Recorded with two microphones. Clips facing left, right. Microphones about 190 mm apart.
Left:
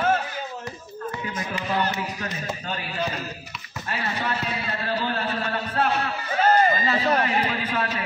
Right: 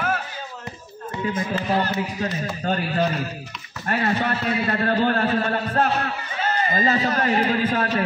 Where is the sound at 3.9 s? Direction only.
55° right (ahead or behind).